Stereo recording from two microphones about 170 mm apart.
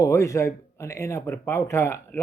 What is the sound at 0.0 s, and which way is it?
Speech, 20° left (ahead or behind).